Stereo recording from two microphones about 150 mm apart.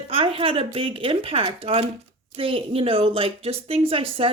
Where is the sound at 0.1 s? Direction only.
40° right (ahead or behind).